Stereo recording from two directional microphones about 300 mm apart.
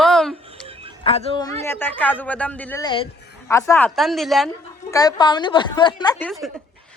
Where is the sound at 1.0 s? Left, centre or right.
Centre.